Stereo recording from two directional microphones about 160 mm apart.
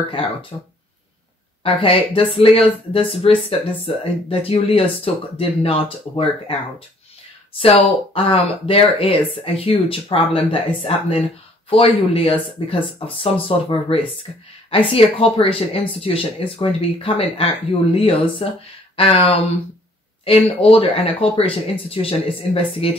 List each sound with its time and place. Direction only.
0.1 s speech: 35° left (ahead or behind)
1.6 s speech: 35° left (ahead or behind)
7.5 s speech: 35° left (ahead or behind)
20.7 s speech: 35° left (ahead or behind)